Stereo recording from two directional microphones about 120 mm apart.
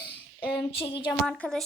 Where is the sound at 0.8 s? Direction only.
45° left (ahead or behind).